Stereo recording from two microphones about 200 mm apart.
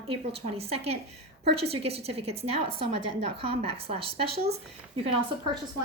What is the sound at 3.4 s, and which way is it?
Speech, 30° right (ahead or behind).